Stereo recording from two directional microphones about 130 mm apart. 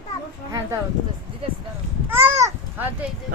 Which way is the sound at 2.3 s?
20° right (ahead or behind).